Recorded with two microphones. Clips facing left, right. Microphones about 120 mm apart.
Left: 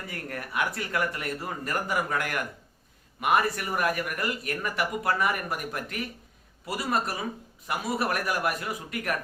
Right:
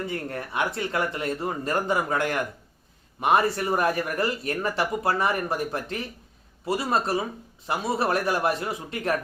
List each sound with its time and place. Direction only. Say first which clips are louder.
0.1 s speech: right 4 dB; 25° right (ahead or behind)